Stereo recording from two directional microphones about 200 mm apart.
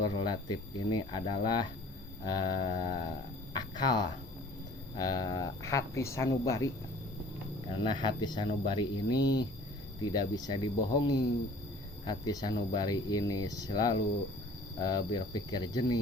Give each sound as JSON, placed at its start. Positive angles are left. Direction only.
{"t": 0.0, "sound": "speech", "side_deg": 20}
{"t": 7.7, "sound": "speech", "side_deg": 25}